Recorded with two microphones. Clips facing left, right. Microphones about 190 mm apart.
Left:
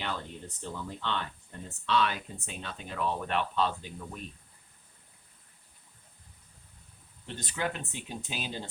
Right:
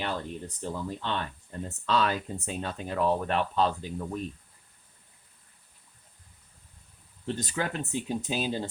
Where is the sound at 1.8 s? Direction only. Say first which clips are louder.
Right 2 dB; 40° right (ahead or behind).